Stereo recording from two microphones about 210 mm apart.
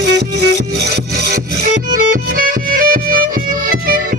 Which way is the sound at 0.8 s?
50° right (ahead or behind).